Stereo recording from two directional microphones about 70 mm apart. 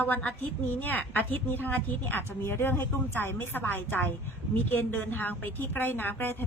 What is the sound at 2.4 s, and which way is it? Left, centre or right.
A woman's voice, left.